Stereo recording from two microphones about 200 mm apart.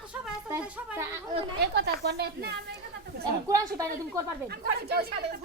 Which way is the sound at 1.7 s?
55° right (ahead or behind).